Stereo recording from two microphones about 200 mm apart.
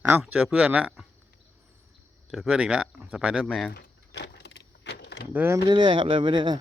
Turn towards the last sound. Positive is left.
turn(degrees=-25)  # may be behind; listen again after turning